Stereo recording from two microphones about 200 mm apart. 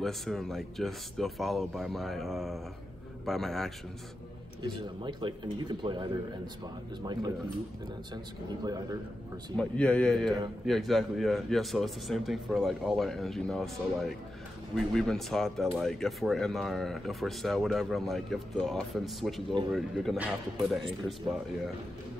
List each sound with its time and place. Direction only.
0.0 s speech: centre (ahead or behind)
4.6 s speech: 25° right (ahead or behind)
8.1 s speech: 20° right (ahead or behind)
9.6 s speech: 5° left (ahead or behind)